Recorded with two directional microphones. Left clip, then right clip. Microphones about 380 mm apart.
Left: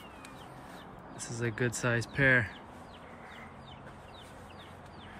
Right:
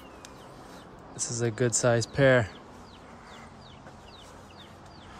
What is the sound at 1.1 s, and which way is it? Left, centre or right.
Speech, centre.